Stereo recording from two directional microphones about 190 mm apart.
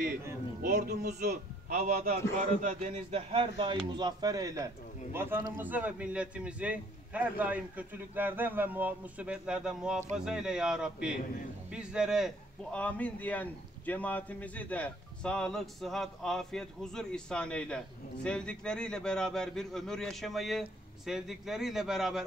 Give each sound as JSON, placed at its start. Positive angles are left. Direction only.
{"t": 0.6, "sound": "a man's voice", "side_deg": -50}
{"t": 12.7, "sound": "a man's voice", "side_deg": 5}